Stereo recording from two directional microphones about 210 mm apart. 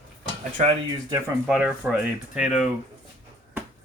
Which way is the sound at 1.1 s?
5° right (ahead or behind).